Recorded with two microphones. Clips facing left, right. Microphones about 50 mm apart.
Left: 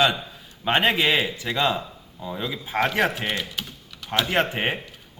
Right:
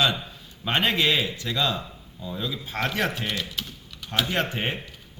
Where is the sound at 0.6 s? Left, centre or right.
Left; by 4.3 s centre.